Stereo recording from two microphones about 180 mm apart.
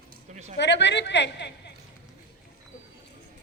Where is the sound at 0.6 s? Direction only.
75° left (ahead or behind).